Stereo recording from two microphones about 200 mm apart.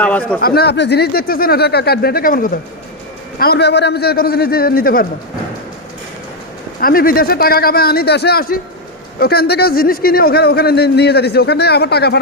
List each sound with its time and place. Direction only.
0.0 s speech: 10° left (ahead or behind)
0.4 s a man's voice: 55° left (ahead or behind)
6.7 s a man's voice: 45° left (ahead or behind)